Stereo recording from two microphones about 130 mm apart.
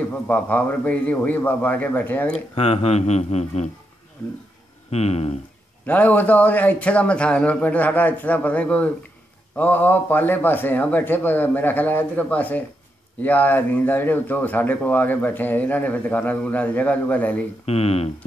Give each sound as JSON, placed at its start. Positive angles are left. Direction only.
{"t": 0.1, "sound": "speech", "side_deg": 10}
{"t": 2.5, "sound": "speech", "side_deg": 50}
{"t": 4.9, "sound": "speech", "side_deg": 55}
{"t": 5.9, "sound": "speech", "side_deg": 10}
{"t": 17.6, "sound": "speech", "side_deg": 50}